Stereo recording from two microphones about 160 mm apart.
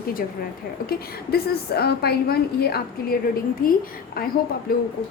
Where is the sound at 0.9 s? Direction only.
80° left.